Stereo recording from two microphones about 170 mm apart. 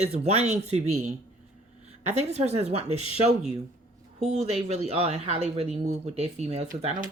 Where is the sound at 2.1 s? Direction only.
40° right (ahead or behind).